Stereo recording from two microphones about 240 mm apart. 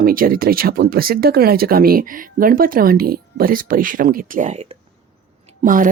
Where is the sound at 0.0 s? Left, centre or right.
Right.